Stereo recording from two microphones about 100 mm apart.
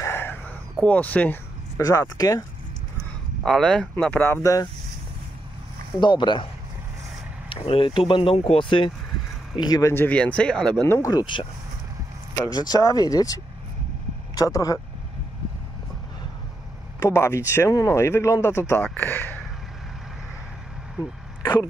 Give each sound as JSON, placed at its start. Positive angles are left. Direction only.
{"t": 0.0, "sound": "a sound", "side_deg": 20}
{"t": 0.8, "sound": "speech", "side_deg": 15}
{"t": 1.8, "sound": "speech", "side_deg": 35}
{"t": 3.4, "sound": "speech", "side_deg": 5}
{"t": 4.2, "sound": "speech", "side_deg": 30}
{"t": 5.9, "sound": "speech", "side_deg": 50}
{"t": 7.4, "sound": "speech", "side_deg": 65}
{"t": 9.6, "sound": "speech", "side_deg": 40}
{"t": 9.8, "sound": "speech", "side_deg": 20}
{"t": 10.8, "sound": "speech", "side_deg": 25}
{"t": 11.1, "sound": "speech", "side_deg": 40}
{"t": 12.4, "sound": "speech", "side_deg": 40}
{"t": 17.0, "sound": "speech", "side_deg": 30}